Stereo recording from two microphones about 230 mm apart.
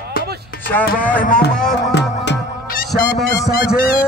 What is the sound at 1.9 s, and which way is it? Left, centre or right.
Music, left.